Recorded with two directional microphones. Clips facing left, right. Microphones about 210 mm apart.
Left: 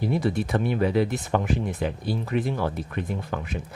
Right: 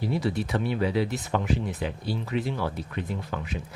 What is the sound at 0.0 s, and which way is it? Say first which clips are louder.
Speech: left 3 dB; 50° left (ahead or behind).